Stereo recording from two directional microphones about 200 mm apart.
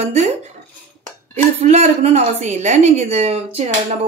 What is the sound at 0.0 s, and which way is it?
Speech, 30° right (ahead or behind).